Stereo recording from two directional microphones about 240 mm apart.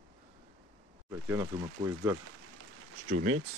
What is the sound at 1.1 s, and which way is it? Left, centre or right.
Speech, centre.